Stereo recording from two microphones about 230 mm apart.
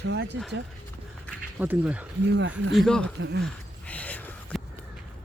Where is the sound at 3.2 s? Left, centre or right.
Right.